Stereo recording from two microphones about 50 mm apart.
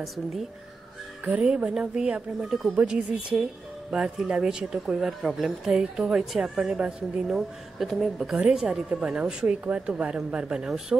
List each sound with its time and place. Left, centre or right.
0.0 s speech: centre
1.4 s speech: centre
7.2 s speech: centre
8.5 s speech: centre
9.5 s speech: right
10.9 s speech: right